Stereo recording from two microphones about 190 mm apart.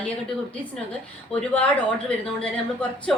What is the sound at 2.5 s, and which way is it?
Speech, 5° left (ahead or behind).